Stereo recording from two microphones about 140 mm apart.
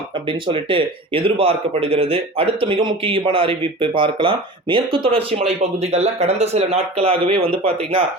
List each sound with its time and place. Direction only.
0.3 s speech: 40° right (ahead or behind)